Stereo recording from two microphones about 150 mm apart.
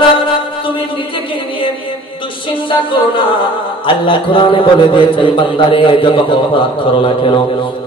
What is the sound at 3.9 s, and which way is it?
A man's voice, 35° left (ahead or behind).